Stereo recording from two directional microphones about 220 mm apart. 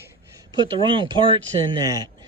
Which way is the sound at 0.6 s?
20° right (ahead or behind).